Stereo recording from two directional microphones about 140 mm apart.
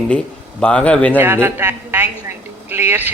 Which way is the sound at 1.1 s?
15° right (ahead or behind).